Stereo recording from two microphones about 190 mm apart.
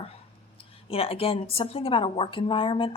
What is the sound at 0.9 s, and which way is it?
A woman's voice, 30° left (ahead or behind).